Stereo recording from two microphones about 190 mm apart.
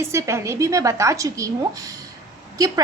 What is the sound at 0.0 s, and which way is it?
A woman's voice, 15° right (ahead or behind).